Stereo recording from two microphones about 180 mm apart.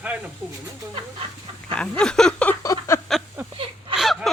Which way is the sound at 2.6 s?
15° left (ahead or behind).